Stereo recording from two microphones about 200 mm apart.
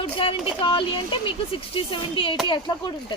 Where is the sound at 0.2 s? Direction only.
25° left (ahead or behind).